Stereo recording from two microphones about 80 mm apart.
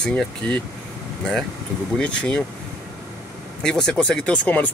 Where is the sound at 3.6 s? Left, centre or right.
Centre.